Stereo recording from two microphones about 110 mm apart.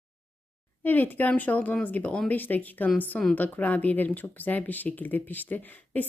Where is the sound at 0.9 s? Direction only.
15° left (ahead or behind).